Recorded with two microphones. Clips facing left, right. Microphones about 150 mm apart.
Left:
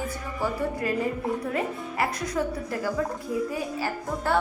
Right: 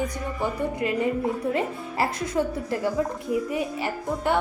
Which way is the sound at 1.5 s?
25° right (ahead or behind).